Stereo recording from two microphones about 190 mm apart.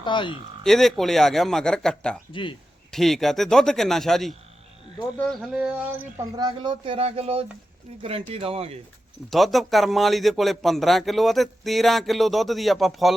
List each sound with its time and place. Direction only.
0.0 s speech: 25° left (ahead or behind)
0.6 s speech: centre (ahead or behind)
2.3 s speech: 25° left (ahead or behind)
2.9 s speech: centre (ahead or behind)
6.3 s speech: 25° right (ahead or behind)
9.3 s speech: centre (ahead or behind)